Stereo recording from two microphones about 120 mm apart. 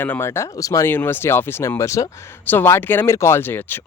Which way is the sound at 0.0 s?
15° left (ahead or behind).